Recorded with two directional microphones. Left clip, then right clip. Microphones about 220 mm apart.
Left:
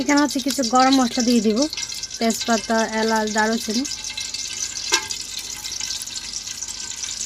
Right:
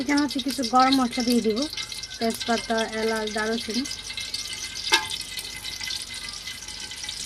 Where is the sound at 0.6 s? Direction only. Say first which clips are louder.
Left 3 dB; 50° left (ahead or behind).